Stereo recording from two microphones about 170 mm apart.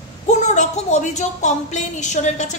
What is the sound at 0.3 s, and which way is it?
A woman's voice, 45° left (ahead or behind).